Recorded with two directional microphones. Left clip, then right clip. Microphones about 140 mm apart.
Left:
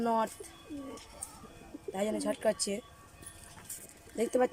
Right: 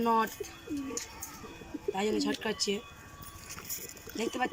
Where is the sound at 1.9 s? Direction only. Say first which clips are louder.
Right 1 dB; 50° left (ahead or behind).